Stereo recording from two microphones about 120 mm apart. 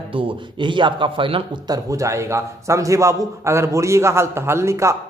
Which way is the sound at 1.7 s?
25° right (ahead or behind).